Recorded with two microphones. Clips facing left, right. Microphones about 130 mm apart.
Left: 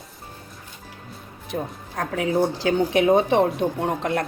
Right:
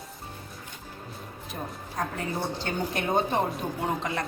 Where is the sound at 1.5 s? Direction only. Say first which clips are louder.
Left 7 dB; 75° left (ahead or behind).